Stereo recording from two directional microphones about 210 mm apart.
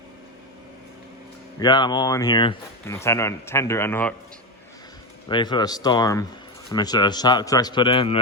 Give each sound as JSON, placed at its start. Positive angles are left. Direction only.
{"t": 1.5, "sound": "a man's voice", "side_deg": 20}
{"t": 5.3, "sound": "a man's voice", "side_deg": 20}